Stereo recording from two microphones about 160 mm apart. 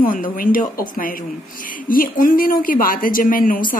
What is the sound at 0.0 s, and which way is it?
Speech, 60° left (ahead or behind).